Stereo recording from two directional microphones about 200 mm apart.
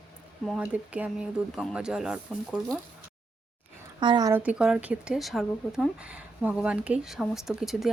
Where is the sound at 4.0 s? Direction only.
20° right (ahead or behind).